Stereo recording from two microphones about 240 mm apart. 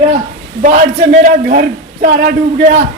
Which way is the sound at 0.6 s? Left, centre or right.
Right.